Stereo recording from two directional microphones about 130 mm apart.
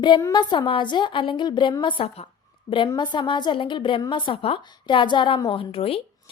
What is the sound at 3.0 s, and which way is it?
A woman's voice, 35° left (ahead or behind).